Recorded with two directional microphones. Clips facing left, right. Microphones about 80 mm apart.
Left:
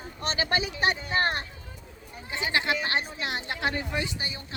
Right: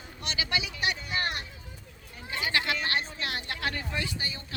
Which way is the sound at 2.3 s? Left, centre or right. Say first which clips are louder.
Left 2 dB; left.